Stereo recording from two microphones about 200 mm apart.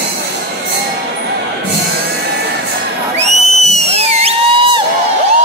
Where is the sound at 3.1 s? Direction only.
35° right (ahead or behind).